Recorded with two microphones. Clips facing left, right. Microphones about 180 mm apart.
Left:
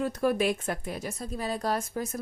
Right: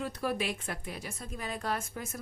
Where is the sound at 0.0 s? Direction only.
45° left (ahead or behind).